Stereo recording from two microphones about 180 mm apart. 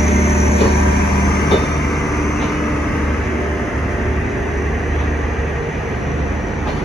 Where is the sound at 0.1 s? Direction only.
35° left (ahead or behind).